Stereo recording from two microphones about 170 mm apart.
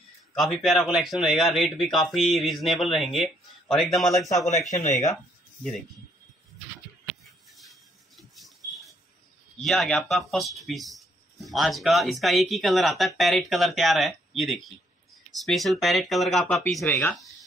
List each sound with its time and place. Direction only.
0.3 s speech: centre (ahead or behind)
4.6 s speech: 45° left (ahead or behind)
5.6 s speech: centre (ahead or behind)
8.2 s a sound: centre (ahead or behind)
9.6 s speech: centre (ahead or behind)